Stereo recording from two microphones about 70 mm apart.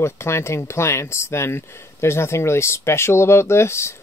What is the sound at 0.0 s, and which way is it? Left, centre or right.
Speech, left.